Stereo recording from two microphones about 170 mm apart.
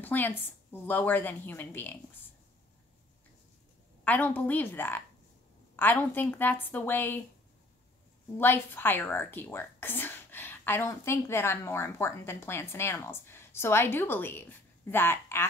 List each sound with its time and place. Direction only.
0.0 s speech: 10° left (ahead or behind)
4.0 s speech: 10° left (ahead or behind)
8.4 s speech: 10° left (ahead or behind)